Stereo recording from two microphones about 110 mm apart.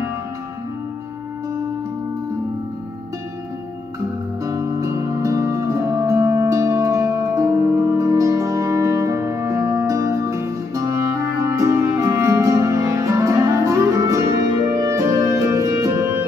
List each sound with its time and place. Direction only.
4.4 s music: 30° right (ahead or behind)